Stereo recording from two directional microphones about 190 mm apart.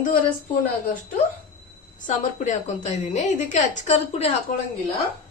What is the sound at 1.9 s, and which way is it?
A woman's voice, 40° left (ahead or behind).